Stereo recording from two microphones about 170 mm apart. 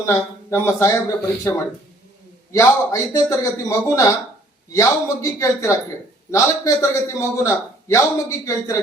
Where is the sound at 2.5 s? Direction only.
20° left (ahead or behind).